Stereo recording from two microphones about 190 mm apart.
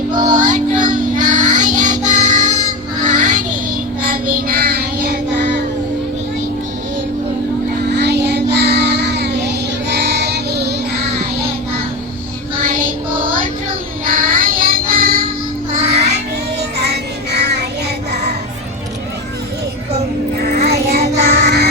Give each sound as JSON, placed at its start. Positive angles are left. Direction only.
{"t": 0.2, "sound": "child singing", "side_deg": -40}
{"t": 7.9, "sound": "child singing", "side_deg": -60}
{"t": 12.6, "sound": "music", "side_deg": -45}
{"t": 14.0, "sound": "child singing", "side_deg": -50}
{"t": 15.8, "sound": "child singing", "side_deg": -35}
{"t": 16.7, "sound": "child singing", "side_deg": -60}
{"t": 20.4, "sound": "music", "side_deg": -55}